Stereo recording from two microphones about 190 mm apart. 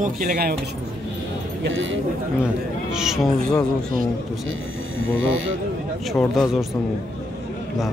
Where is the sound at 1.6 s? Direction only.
80° right.